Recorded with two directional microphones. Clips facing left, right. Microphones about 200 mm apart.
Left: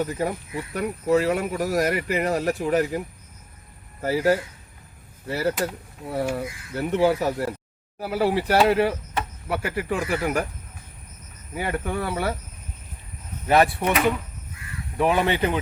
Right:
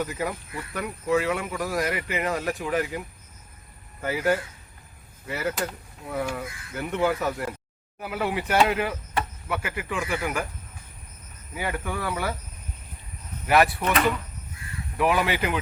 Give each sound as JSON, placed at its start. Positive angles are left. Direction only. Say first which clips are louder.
{"t": 0.0, "sound": "speech", "louder": "left 3 dB", "side_deg": 30}
{"t": 4.0, "sound": "speech", "louder": "left 4 dB", "side_deg": 35}
{"t": 11.5, "sound": "speech", "louder": "left 3 dB", "side_deg": 35}
{"t": 13.5, "sound": "speech", "louder": "left 2 dB", "side_deg": 25}
{"t": 13.8, "sound": "speech", "louder": "left 2 dB", "side_deg": 10}
{"t": 14.9, "sound": "speech", "louder": "left 2 dB", "side_deg": 25}